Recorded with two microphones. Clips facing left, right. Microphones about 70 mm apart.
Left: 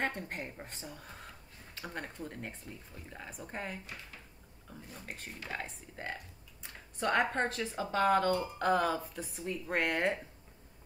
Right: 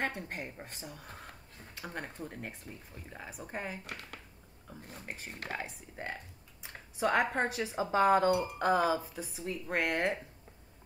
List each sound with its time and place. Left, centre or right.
0.0 s speech: centre
3.8 s speech: right
5.0 s speech: centre